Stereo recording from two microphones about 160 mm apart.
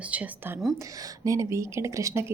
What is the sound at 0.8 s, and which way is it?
Speech, 20° right (ahead or behind).